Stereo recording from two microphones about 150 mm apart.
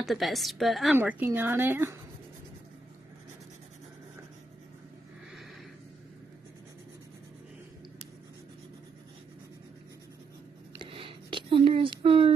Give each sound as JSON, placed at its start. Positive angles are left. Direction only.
{"t": 0.0, "sound": "a woman's voice", "side_deg": 0}
{"t": 0.9, "sound": "a woman's voice", "side_deg": -15}
{"t": 10.8, "sound": "a sound", "side_deg": -35}